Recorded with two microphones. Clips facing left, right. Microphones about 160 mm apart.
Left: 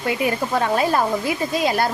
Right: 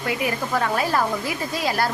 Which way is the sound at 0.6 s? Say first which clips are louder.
Left 3 dB; 25° left (ahead or behind).